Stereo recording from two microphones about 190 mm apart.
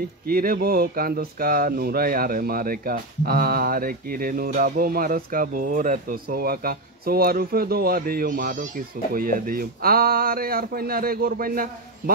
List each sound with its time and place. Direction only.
0.3 s speech: 50° right (ahead or behind)